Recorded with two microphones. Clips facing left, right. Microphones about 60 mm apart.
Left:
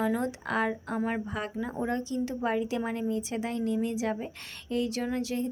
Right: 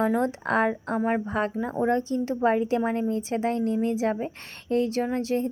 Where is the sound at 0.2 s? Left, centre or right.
Right.